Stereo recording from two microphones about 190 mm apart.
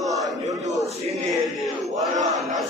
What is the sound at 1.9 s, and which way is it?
Battle cry, 40° right (ahead or behind).